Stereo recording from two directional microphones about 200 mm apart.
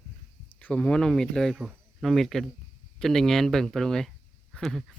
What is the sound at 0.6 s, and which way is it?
Speech, 5° left (ahead or behind).